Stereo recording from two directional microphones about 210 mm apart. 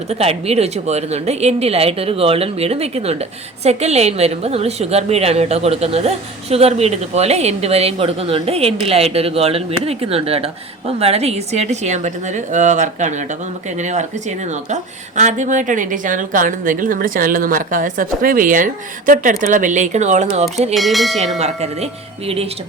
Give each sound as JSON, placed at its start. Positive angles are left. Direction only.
{"t": 0.1, "sound": "a woman's voice", "side_deg": -30}
{"t": 20.7, "sound": "speech", "side_deg": 0}
{"t": 21.3, "sound": "a woman's voice", "side_deg": -30}